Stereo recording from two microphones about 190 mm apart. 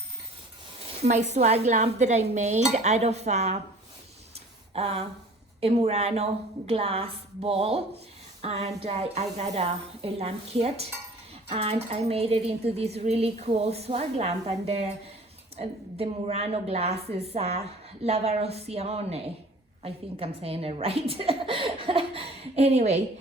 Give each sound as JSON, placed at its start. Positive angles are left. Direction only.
{"t": 1.3, "sound": "speech", "side_deg": -35}
{"t": 4.7, "sound": "a sound", "side_deg": -30}
{"t": 5.5, "sound": "speech", "side_deg": -30}